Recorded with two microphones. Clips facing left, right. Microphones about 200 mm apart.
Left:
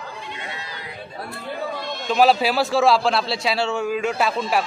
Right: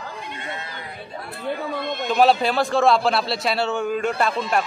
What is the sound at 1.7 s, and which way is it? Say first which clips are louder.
Speech: right 4 dB; 55° right (ahead or behind).